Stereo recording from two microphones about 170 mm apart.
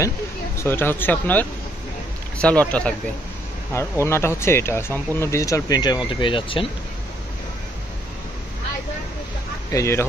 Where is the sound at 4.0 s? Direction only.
15° left (ahead or behind); by 6.7 s 30° left (ahead or behind).